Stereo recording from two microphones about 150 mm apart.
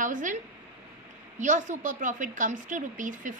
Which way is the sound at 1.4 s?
55° right (ahead or behind).